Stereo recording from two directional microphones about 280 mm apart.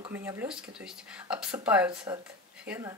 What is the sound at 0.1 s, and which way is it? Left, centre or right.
Speech, centre.